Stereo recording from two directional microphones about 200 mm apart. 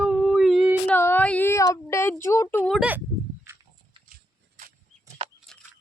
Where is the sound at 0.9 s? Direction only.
10° left (ahead or behind).